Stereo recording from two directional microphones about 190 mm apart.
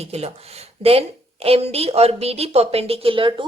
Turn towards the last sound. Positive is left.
turn(degrees=-25)  # may be behind; listen again after turning